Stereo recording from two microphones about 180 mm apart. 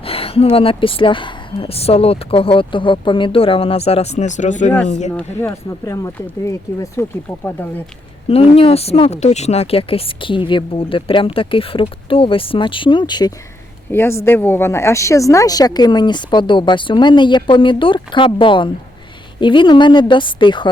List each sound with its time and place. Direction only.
0.0 s speech: 30° left (ahead or behind)
5.1 s speech: 10° left (ahead or behind)
8.3 s speech: 30° left (ahead or behind)
13.9 s speech: 15° left (ahead or behind)